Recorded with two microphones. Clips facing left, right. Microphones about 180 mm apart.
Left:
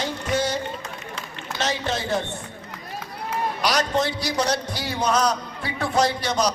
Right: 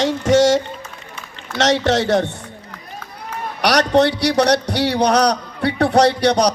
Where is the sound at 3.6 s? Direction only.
70° right (ahead or behind).